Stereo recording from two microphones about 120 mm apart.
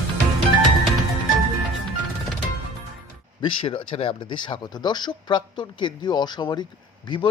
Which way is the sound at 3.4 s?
45° left (ahead or behind).